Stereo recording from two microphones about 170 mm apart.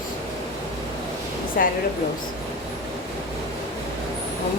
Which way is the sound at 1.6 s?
60° left (ahead or behind).